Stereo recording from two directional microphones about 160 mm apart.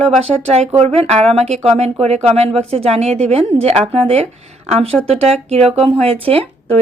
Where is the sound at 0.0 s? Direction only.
40° right (ahead or behind).